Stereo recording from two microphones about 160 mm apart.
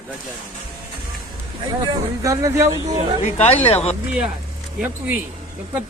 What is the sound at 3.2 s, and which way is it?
Speech, 40° left (ahead or behind).